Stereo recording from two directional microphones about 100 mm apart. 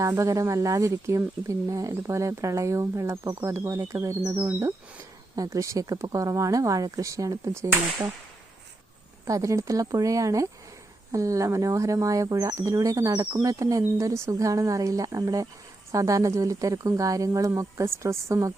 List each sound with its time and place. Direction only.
0.0 s speech: 30° right (ahead or behind)
9.2 s speech: 35° right (ahead or behind)